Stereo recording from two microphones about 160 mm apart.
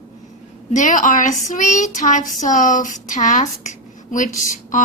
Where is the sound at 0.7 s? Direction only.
50° left (ahead or behind).